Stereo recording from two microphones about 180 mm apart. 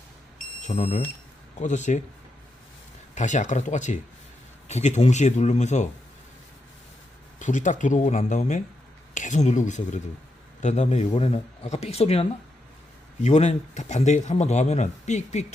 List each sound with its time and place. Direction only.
0.6 s speech: 35° left (ahead or behind)
3.2 s speech: 40° left (ahead or behind)
7.3 s speech: 45° left (ahead or behind)